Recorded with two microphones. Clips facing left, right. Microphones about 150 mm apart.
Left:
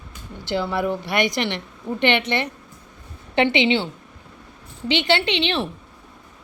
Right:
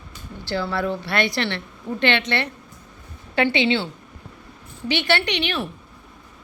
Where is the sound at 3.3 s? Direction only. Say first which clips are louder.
Left 2 dB; 20° left (ahead or behind).